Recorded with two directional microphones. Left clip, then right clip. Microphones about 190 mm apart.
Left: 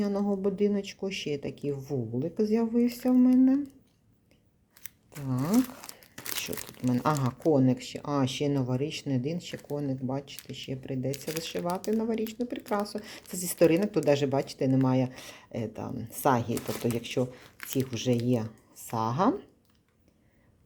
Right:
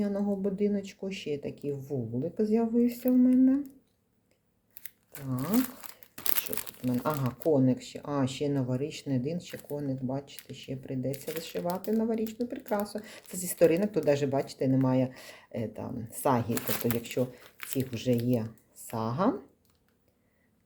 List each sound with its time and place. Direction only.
0.0 s speech: 25° left (ahead or behind)
5.3 s speech: 40° left (ahead or behind)
6.8 s speech: 35° left (ahead or behind)